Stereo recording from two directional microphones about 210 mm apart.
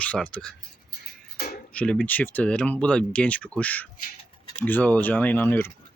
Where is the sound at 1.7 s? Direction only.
5° left (ahead or behind).